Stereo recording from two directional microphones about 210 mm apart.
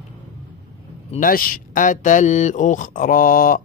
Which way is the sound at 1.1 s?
40° left (ahead or behind).